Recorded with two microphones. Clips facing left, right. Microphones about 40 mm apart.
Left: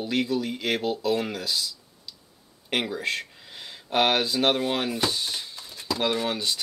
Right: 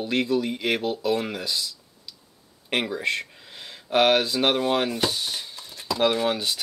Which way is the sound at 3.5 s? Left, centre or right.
Centre.